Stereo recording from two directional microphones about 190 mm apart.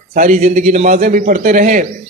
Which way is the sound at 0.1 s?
45° right (ahead or behind).